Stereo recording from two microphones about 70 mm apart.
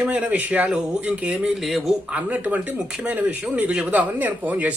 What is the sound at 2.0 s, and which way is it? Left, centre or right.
A woman's voice, right.